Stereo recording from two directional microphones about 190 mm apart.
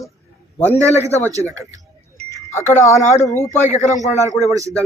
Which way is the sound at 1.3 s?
15° right (ahead or behind).